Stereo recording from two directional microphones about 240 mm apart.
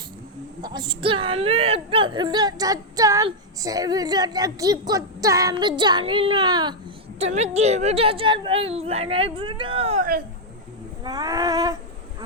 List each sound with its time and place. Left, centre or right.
0.6 s a woman's voice: centre